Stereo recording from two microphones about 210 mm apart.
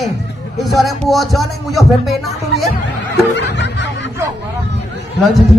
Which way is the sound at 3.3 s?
60° left (ahead or behind).